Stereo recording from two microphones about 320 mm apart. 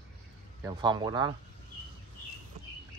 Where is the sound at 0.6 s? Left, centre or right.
Centre.